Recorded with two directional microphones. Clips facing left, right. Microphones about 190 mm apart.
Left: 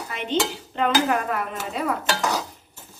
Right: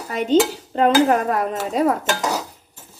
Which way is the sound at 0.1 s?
40° right (ahead or behind).